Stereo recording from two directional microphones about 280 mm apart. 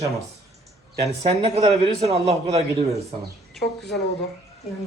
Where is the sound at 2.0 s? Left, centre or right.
Right.